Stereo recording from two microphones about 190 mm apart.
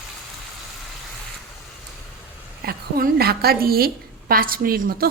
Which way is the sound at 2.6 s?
55° right (ahead or behind).